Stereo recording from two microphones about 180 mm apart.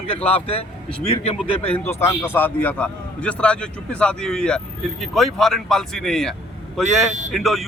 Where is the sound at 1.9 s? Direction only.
15° left (ahead or behind).